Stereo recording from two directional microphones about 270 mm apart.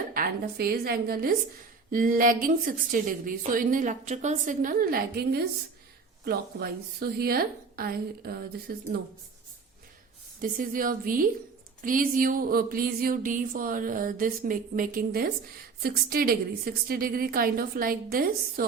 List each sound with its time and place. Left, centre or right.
0.1 s a woman's voice: right
10.4 s a woman's voice: right